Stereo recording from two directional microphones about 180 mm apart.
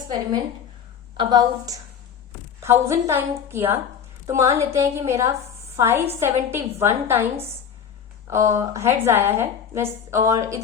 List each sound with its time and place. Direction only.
1.1 s a woman's voice: 25° right (ahead or behind)
2.8 s a woman's voice: 15° right (ahead or behind)
8.3 s a woman's voice: 15° right (ahead or behind)